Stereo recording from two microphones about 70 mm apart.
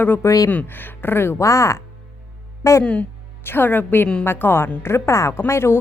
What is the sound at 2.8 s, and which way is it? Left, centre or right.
A woman's voice, centre.